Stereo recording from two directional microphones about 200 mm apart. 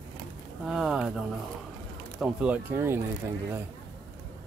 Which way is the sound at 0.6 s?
Centre (ahead or behind).